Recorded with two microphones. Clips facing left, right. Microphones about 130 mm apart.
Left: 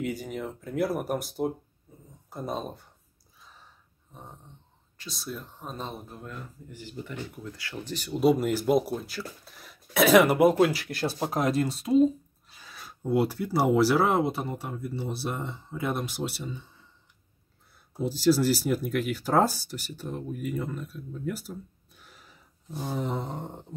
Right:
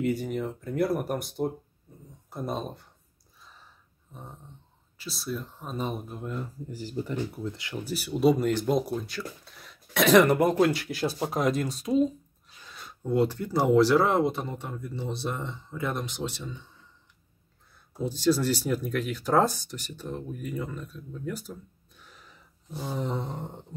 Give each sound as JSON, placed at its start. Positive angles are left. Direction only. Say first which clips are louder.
{"t": 0.0, "sound": "speech", "louder": "right 4 dB", "side_deg": 0}
{"t": 1.9, "sound": "a sound", "louder": "right 1 dB", "side_deg": 0}
{"t": 2.2, "sound": "speech", "louder": "right 1 dB", "side_deg": 0}
{"t": 4.1, "sound": "dog", "louder": "right 1 dB", "side_deg": 0}
{"t": 4.9, "sound": "speech", "louder": "right 4 dB", "side_deg": -5}
{"t": 5.9, "sound": "speech", "louder": "right 5 dB", "side_deg": -20}
{"t": 6.7, "sound": "speech", "louder": "right 6 dB", "side_deg": -35}
{"t": 7.5, "sound": "speech", "louder": "right 2 dB", "side_deg": -20}
{"t": 7.9, "sound": "speech", "louder": "even", "side_deg": -5}
{"t": 18.0, "sound": "speech", "louder": "left 2 dB", "side_deg": 5}
{"t": 22.9, "sound": "speech", "louder": "even", "side_deg": 0}